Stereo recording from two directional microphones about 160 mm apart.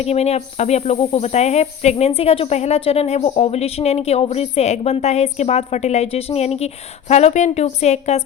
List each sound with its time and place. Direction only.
0.0 s a woman's voice: 40° left (ahead or behind)